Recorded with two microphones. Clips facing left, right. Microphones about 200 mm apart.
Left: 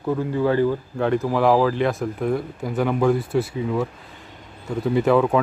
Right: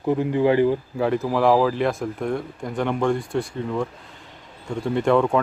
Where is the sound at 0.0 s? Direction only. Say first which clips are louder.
Right 2 dB; 20° right (ahead or behind).